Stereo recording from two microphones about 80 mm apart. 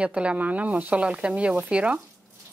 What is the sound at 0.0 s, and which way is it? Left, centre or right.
Speech, centre.